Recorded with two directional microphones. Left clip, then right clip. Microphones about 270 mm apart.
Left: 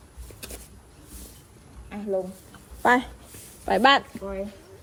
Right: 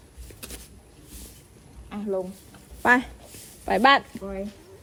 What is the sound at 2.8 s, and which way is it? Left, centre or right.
Speech, centre.